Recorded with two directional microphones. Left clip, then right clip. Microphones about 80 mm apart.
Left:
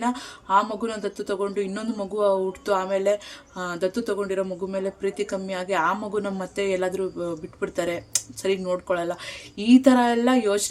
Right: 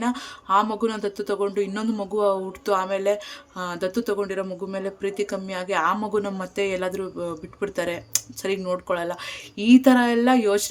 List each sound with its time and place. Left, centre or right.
0.0 s speech: right